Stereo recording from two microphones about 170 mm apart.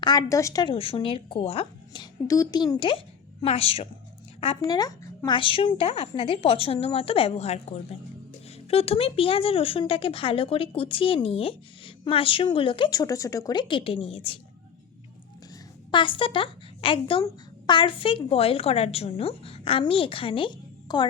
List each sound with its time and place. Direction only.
0.0 s a woman's voice: 25° left (ahead or behind)
4.7 s a woman's voice: 20° left (ahead or behind)
15.9 s a woman's voice: 30° left (ahead or behind)